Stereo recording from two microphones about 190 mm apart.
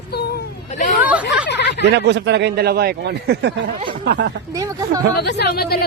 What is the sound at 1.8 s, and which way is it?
Speech, 65° right (ahead or behind).